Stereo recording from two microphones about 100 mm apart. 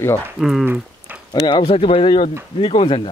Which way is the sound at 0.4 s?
5° right (ahead or behind).